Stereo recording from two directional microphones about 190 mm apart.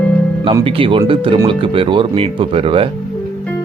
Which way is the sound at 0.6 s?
30° right (ahead or behind).